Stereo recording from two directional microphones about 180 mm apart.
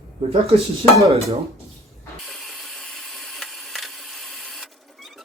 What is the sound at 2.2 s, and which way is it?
Ratchet, centre (ahead or behind).